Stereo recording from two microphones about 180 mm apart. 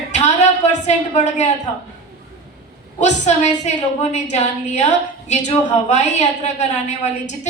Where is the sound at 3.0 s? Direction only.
40° left (ahead or behind).